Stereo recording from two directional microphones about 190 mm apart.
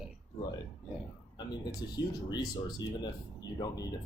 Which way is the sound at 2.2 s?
20° left (ahead or behind).